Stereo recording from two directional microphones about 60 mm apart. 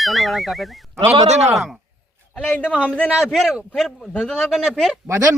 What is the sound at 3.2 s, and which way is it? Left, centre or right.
Speech, centre.